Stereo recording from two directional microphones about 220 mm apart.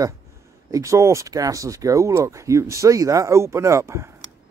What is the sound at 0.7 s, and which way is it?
Speech, 15° right (ahead or behind).